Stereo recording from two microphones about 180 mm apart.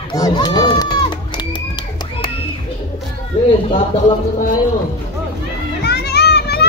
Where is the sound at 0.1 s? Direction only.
20° left (ahead or behind).